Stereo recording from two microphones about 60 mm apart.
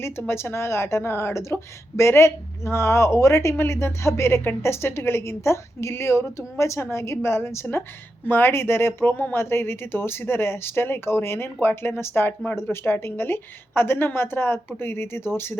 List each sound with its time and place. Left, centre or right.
0.2 s a woman's voice: left